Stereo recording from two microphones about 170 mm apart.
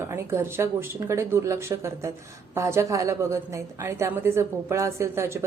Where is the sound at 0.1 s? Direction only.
15° right (ahead or behind).